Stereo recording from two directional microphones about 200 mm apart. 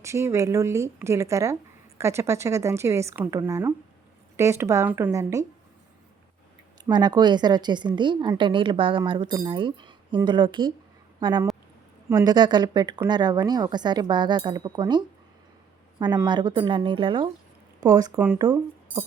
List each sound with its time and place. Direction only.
0.0 s a woman's voice: 15° right (ahead or behind)
6.8 s a woman's voice: 20° right (ahead or behind)